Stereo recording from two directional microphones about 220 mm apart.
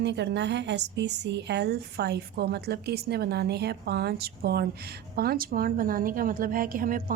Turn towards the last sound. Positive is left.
turn(degrees=-40)  # may be behind; listen again after turning